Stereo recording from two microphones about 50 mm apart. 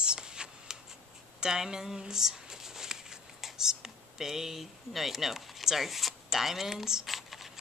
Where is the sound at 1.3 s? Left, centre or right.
Centre.